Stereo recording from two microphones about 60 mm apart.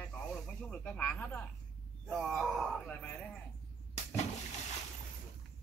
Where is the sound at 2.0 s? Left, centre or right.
Centre.